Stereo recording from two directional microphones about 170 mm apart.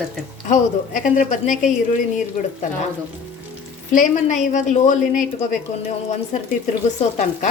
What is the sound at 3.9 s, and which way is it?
A woman's voice, 45° left (ahead or behind).